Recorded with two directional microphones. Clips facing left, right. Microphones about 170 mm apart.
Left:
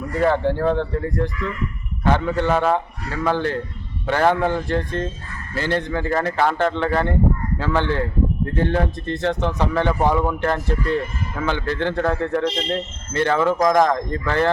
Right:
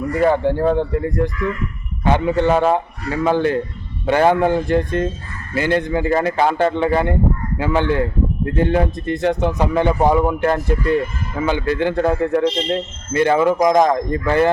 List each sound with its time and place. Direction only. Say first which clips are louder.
0.1 s speech: right 2 dB; 15° right (ahead or behind)